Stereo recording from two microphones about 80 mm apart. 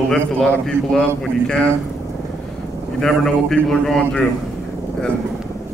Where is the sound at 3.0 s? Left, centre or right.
Centre.